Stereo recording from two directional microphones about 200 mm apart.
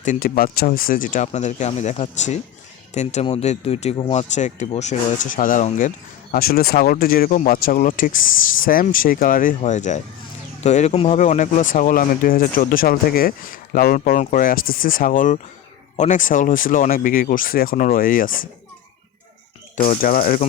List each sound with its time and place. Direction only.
0.0 s speech: 45° left (ahead or behind)
6.3 s speech: 50° left (ahead or behind)
19.7 s speech: 40° left (ahead or behind)